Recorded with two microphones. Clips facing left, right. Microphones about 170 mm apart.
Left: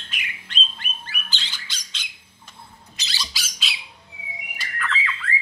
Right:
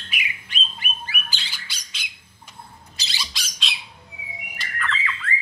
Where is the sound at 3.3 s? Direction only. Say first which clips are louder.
Even; centre (ahead or behind).